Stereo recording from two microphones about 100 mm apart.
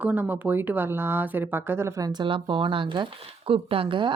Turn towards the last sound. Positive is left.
turn(degrees=-55)  # may be behind; listen again after turning